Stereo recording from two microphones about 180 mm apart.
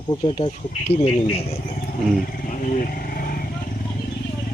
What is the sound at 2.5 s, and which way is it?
Vehicle, 45° left (ahead or behind).